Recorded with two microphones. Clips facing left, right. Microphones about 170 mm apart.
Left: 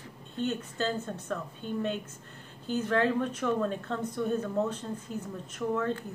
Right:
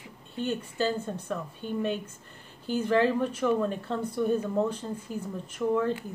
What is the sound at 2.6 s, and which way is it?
A woman's voice, 10° right (ahead or behind).